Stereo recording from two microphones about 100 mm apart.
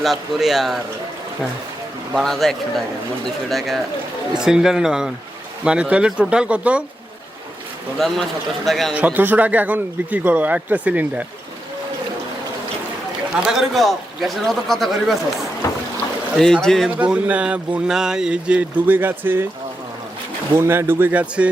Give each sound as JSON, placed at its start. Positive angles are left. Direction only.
{"t": 0.0, "sound": "speech", "side_deg": 0}
{"t": 2.1, "sound": "speech", "side_deg": 5}
{"t": 4.4, "sound": "speech", "side_deg": -5}
{"t": 7.9, "sound": "speech", "side_deg": 0}
{"t": 9.0, "sound": "speech", "side_deg": -15}
{"t": 13.5, "sound": "speech", "side_deg": 0}
{"t": 15.6, "sound": "boat", "side_deg": 30}
{"t": 16.4, "sound": "speech", "side_deg": 5}
{"t": 17.0, "sound": "speech", "side_deg": -15}
{"t": 20.6, "sound": "speech", "side_deg": -25}